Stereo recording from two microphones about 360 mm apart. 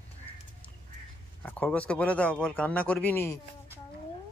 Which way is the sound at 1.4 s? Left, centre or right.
Centre.